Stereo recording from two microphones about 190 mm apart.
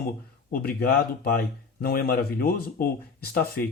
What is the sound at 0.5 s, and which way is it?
Speech, 55° left (ahead or behind).